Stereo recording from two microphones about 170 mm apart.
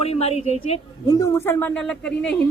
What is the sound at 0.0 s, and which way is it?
Speech, 35° left (ahead or behind).